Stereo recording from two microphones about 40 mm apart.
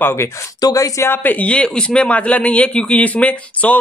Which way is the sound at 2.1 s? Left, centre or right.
Left.